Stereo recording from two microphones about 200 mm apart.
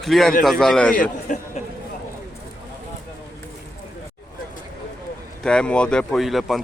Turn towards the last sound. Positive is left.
turn(degrees=0)  # may be behind; listen again after turning